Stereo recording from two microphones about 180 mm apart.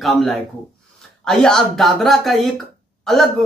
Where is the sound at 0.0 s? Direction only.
Centre (ahead or behind).